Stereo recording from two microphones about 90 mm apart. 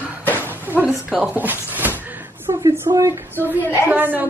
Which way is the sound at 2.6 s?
45° right (ahead or behind).